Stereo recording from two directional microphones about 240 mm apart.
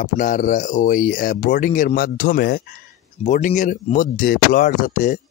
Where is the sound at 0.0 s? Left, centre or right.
Left.